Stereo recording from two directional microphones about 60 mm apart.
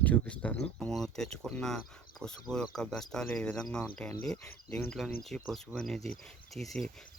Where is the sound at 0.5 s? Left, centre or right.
Centre.